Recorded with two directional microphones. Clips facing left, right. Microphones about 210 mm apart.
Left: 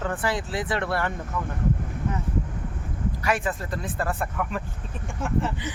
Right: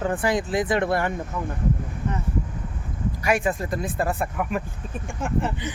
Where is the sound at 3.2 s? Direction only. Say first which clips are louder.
Right 4 dB; 15° right (ahead or behind).